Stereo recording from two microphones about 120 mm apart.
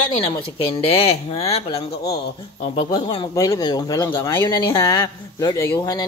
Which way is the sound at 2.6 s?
55° left (ahead or behind).